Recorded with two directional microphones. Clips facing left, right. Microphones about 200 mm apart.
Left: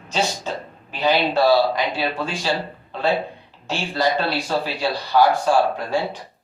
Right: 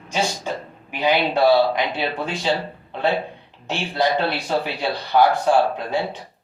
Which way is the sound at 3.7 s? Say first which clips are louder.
Even; 20° right (ahead or behind).